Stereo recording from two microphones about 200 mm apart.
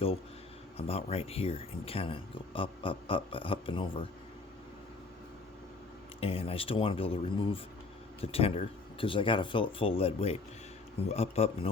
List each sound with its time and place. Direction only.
0.8 s speech: 30° left (ahead or behind)
6.1 s a man's voice: 30° left (ahead or behind)